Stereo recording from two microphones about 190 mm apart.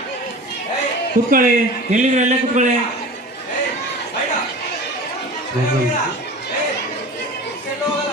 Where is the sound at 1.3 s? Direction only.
45° right (ahead or behind).